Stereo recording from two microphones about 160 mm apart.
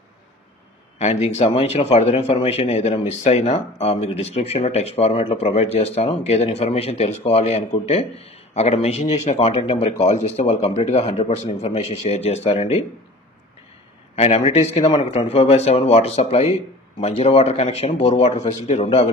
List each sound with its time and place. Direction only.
0.9 s speech: 45° left (ahead or behind)
14.1 s speech: 45° left (ahead or behind)